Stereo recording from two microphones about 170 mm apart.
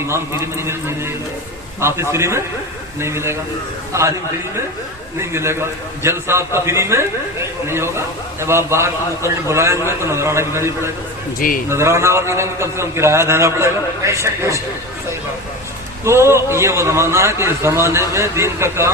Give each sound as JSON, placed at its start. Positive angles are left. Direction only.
{"t": 0.1, "sound": "a man's voice", "side_deg": -15}
{"t": 5.2, "sound": "a man's voice", "side_deg": -15}
{"t": 11.3, "sound": "a man's voice", "side_deg": 55}
{"t": 11.7, "sound": "a man's voice", "side_deg": -15}
{"t": 16.0, "sound": "a man's voice", "side_deg": -15}